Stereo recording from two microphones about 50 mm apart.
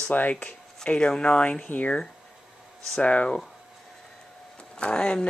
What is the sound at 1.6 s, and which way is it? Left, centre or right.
Speech, left.